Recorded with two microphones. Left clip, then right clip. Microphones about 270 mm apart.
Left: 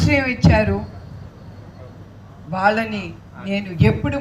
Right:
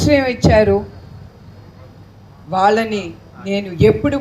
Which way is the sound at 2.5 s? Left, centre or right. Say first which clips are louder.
Right 4 dB; right.